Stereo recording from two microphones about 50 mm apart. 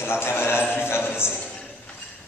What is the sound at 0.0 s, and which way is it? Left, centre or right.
Music, left.